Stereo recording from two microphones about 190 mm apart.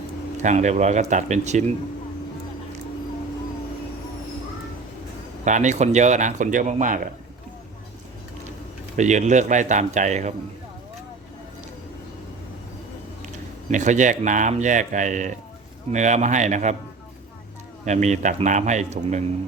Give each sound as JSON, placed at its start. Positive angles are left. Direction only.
{"t": 0.4, "sound": "speech", "side_deg": -40}
{"t": 5.5, "sound": "speech", "side_deg": -40}
{"t": 9.0, "sound": "speech", "side_deg": -40}
{"t": 13.7, "sound": "speech", "side_deg": -40}
{"t": 17.8, "sound": "speech", "side_deg": -40}